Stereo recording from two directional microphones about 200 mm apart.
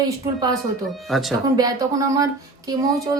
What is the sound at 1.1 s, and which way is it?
Speech, centre (ahead or behind).